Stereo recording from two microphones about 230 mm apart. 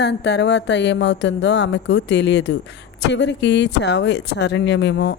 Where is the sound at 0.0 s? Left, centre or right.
Left.